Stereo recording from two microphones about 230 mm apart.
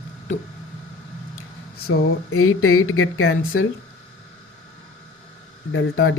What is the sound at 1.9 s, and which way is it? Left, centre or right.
Speech, left.